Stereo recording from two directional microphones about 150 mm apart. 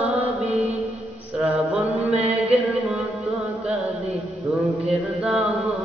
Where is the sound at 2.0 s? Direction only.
45° right (ahead or behind).